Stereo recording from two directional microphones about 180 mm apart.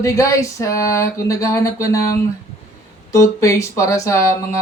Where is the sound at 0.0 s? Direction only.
15° left (ahead or behind).